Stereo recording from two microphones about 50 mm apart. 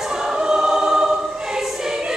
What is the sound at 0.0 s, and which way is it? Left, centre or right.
Choir, centre.